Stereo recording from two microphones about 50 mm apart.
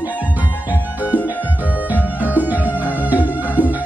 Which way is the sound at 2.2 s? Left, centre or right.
Right.